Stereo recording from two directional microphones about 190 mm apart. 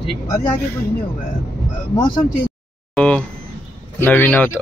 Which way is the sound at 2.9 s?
5° left (ahead or behind).